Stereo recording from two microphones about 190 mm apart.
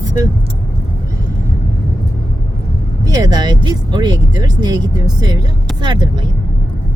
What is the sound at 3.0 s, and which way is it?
Speech, 20° right (ahead or behind).